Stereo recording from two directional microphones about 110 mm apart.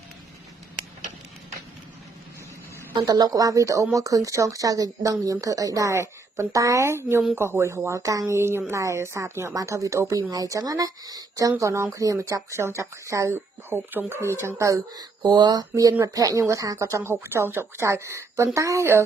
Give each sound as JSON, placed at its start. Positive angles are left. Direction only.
{"t": 2.9, "sound": "speech", "side_deg": -35}